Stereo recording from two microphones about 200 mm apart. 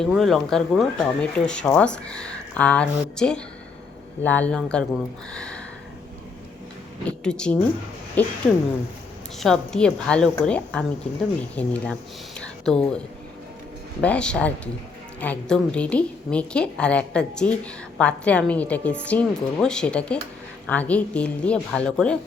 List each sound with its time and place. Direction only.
0.0 s a woman's voice: centre (ahead or behind)
5.3 s a sound: 5° left (ahead or behind)
7.0 s speech: 5° left (ahead or behind)
9.4 s a woman's voice: 5° left (ahead or behind)
12.4 s a sound: 5° left (ahead or behind)
14.0 s a woman's voice: 5° left (ahead or behind)